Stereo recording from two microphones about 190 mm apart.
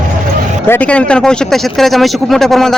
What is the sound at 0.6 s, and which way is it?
Speech, 10° left (ahead or behind).